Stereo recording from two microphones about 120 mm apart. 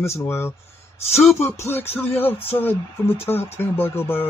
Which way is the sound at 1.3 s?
20° left (ahead or behind).